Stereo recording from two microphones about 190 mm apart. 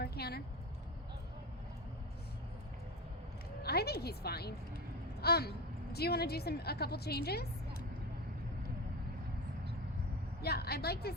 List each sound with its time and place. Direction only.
0.0 s a sound: 55° left (ahead or behind)
3.6 s a woman's voice: 55° left (ahead or behind)
10.4 s speech: 55° left (ahead or behind)